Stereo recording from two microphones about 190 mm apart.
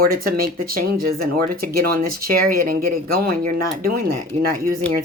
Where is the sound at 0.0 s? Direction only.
50° right (ahead or behind).